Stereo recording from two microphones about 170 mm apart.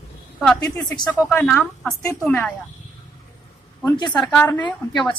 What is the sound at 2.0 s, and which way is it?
Speech, 20° left (ahead or behind).